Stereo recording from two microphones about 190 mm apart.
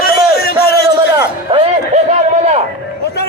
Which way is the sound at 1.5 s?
25° right (ahead or behind).